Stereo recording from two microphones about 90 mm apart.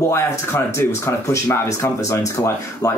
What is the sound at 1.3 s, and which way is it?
Speech, 35° left (ahead or behind).